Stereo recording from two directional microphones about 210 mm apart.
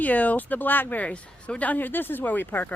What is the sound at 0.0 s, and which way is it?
A woman's voice, 5° left (ahead or behind).